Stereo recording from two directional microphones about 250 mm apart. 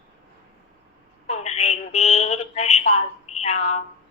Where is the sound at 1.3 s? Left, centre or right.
Left.